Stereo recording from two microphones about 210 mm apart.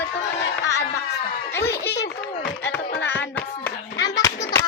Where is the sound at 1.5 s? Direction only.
10° left (ahead or behind).